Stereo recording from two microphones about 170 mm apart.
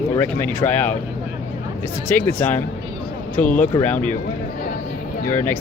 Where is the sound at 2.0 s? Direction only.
10° left (ahead or behind).